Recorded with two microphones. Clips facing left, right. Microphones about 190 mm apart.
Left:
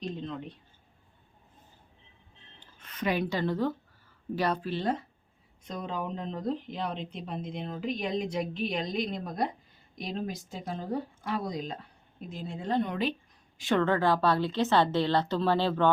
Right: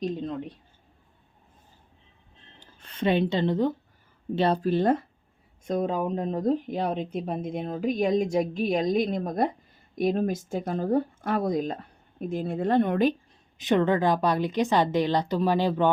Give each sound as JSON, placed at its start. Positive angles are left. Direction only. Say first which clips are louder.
{"t": 2.6, "sound": "speech", "louder": "right 5 dB", "side_deg": -35}
{"t": 4.6, "sound": "speech", "louder": "right 8 dB", "side_deg": -50}
{"t": 13.6, "sound": "a woman's voice", "louder": "right 4 dB", "side_deg": -20}